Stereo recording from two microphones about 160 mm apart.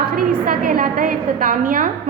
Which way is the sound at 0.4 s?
60° right (ahead or behind).